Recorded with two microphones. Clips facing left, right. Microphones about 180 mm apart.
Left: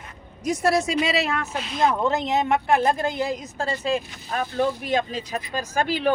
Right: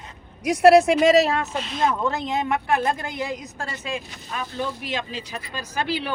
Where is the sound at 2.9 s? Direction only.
35° left (ahead or behind).